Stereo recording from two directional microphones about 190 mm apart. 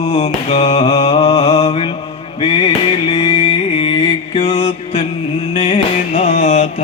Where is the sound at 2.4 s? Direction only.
25° left (ahead or behind).